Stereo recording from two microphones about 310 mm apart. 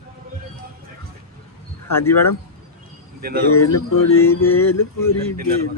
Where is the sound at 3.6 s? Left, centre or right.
Left.